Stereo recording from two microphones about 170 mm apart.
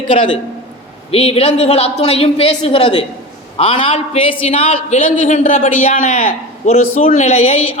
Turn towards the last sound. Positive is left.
turn(degrees=40)  # may be behind; listen again after turning